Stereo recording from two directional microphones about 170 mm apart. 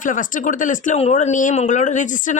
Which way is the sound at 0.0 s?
50° left (ahead or behind).